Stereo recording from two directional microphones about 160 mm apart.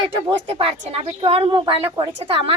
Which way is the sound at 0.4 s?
35° right (ahead or behind).